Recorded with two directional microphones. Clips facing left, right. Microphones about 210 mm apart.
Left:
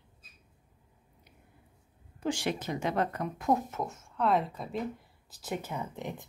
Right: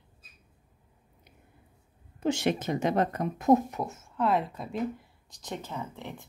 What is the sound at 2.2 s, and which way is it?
Speech, 20° right (ahead or behind).